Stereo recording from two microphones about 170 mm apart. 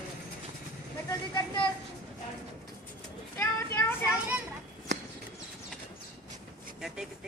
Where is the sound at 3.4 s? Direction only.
15° left (ahead or behind).